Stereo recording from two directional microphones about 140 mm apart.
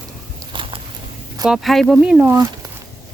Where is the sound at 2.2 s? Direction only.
20° right (ahead or behind).